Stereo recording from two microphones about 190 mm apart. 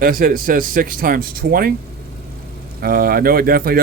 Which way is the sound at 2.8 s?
50° right (ahead or behind).